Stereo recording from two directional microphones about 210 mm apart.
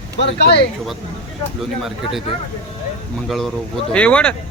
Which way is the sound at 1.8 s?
Centre (ahead or behind).